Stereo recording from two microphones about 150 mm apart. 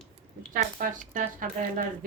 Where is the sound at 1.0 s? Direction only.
65° right (ahead or behind).